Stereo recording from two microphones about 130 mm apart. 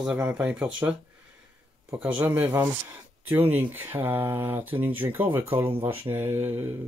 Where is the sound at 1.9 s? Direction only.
10° right (ahead or behind).